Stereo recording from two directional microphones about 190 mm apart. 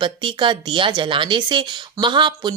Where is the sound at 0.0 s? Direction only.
25° right (ahead or behind).